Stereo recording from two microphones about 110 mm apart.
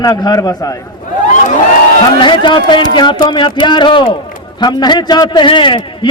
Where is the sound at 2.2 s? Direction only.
45° left (ahead or behind).